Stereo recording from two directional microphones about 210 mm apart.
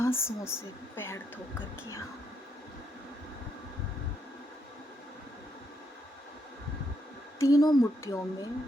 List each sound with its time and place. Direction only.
0.0 s a woman's voice: 10° left (ahead or behind)
7.3 s a woman's voice: 15° left (ahead or behind)